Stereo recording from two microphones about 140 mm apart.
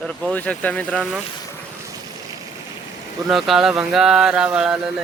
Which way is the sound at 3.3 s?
Centre (ahead or behind).